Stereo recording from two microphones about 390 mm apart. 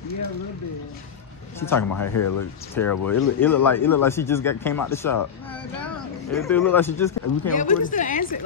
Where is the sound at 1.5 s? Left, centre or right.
Centre.